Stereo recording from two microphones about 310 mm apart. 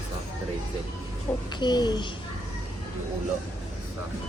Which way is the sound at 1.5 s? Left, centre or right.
Centre.